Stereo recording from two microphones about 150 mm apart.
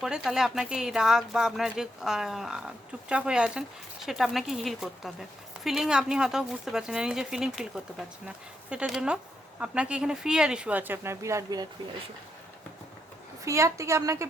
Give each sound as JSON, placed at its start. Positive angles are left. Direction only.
{"t": 0.0, "sound": "speech", "side_deg": 0}
{"t": 13.4, "sound": "a woman's voice", "side_deg": -20}